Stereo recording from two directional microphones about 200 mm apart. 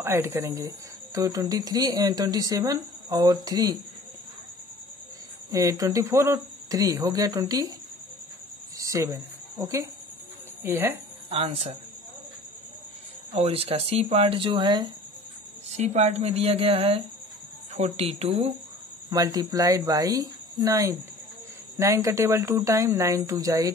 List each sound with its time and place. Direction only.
0.0 s speech: 10° right (ahead or behind)
5.5 s speech: 15° right (ahead or behind)
8.7 s a sound: 15° right (ahead or behind)
10.6 s speech: 10° right (ahead or behind)
11.2 s speech: 30° right (ahead or behind)
13.3 s speech: 30° right (ahead or behind)
15.7 s speech: 35° right (ahead or behind)
19.0 s speech: 15° right (ahead or behind)